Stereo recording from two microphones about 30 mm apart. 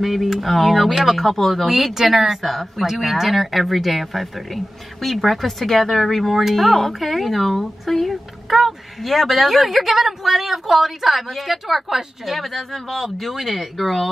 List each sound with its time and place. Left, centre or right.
0.0 s speech: centre
12.3 s speech: centre
13.0 s speech: centre